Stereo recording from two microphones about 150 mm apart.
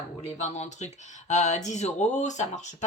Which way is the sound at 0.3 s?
50° left (ahead or behind).